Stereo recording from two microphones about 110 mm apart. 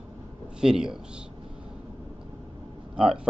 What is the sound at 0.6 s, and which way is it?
Speech, 5° right (ahead or behind).